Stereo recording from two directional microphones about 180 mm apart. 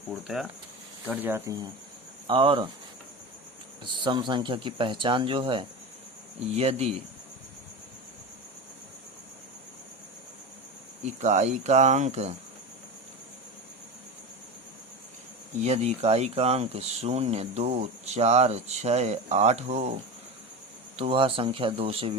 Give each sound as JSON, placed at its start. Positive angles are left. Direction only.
{"t": 0.1, "sound": "speech", "side_deg": 0}
{"t": 2.2, "sound": "speech", "side_deg": -30}
{"t": 4.0, "sound": "speech", "side_deg": -25}
{"t": 11.0, "sound": "speech", "side_deg": -40}
{"t": 15.6, "sound": "speech", "side_deg": -35}
{"t": 20.9, "sound": "speech", "side_deg": -30}